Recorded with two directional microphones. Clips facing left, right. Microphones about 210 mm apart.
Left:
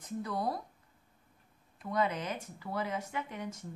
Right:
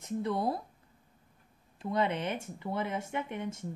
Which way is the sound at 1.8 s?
25° right (ahead or behind).